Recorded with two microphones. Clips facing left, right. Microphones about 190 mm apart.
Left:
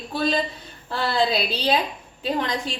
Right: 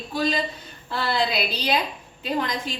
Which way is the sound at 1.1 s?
30° left (ahead or behind).